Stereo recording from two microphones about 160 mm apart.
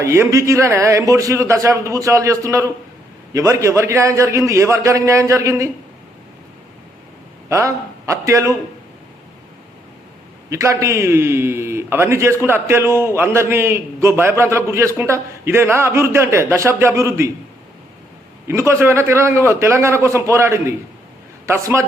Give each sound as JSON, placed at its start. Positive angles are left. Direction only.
{"t": 0.0, "sound": "a man's voice", "side_deg": -20}
{"t": 7.5, "sound": "a man's voice", "side_deg": -20}
{"t": 10.5, "sound": "a man's voice", "side_deg": -20}
{"t": 18.4, "sound": "a man's voice", "side_deg": -15}